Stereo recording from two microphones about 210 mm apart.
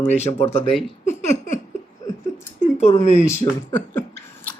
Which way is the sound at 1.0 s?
35° left (ahead or behind).